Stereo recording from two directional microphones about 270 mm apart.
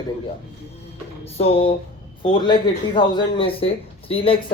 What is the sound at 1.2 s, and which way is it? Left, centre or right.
Speech, left.